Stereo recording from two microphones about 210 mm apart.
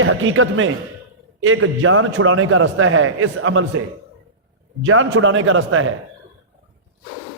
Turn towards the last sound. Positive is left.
turn(degrees=-75)  # may be behind; listen again after turning